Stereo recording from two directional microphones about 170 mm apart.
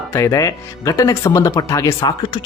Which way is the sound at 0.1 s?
20° left (ahead or behind).